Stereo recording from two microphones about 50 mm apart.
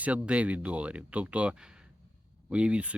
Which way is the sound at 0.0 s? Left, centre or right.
Right.